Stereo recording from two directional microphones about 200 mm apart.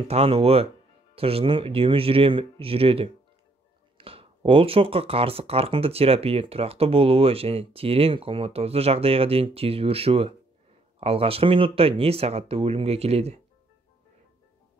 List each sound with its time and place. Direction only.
0.1 s speech: 30° right (ahead or behind)